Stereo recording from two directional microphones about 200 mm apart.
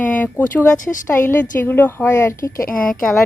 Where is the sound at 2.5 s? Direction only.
45° left (ahead or behind).